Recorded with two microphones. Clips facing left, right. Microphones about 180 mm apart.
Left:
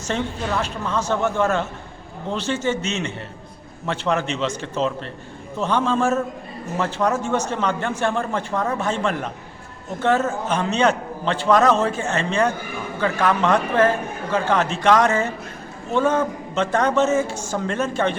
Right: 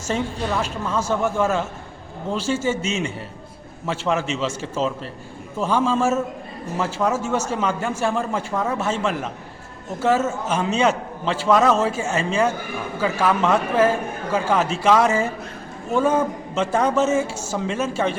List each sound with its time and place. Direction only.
0.1 s a man's voice: 5° right (ahead or behind)